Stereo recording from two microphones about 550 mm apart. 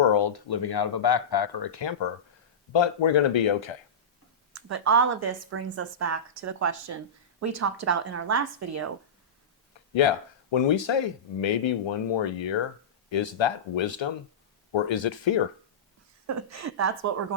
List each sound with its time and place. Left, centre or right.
0.0 s speech: left
4.5 s speech: right
9.9 s speech: left
16.2 s speech: right